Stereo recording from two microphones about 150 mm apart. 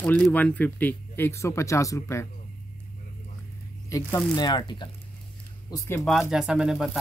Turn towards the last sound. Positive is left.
turn(degrees=-5)  # may be behind; listen again after turning